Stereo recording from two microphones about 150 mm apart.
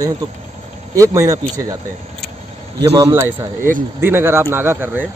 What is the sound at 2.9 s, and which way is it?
Speech, 20° right (ahead or behind).